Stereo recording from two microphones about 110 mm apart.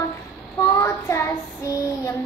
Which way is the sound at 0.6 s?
25° left (ahead or behind).